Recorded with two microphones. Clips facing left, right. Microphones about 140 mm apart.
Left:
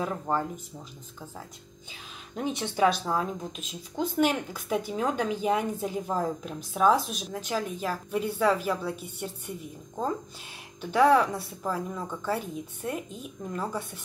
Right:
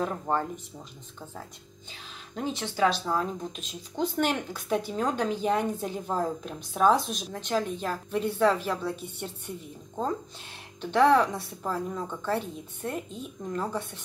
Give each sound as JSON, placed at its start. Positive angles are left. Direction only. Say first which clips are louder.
{"t": 0.0, "sound": "speech", "louder": "right 1 dB", "side_deg": 5}
{"t": 2.3, "sound": "speech", "louder": "left 1 dB", "side_deg": 20}
{"t": 3.1, "sound": "speech", "louder": "even", "side_deg": 5}
{"t": 10.8, "sound": "speech", "louder": "even", "side_deg": 5}